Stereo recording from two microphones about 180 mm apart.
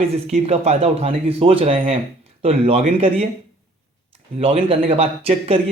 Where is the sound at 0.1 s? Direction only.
35° right (ahead or behind).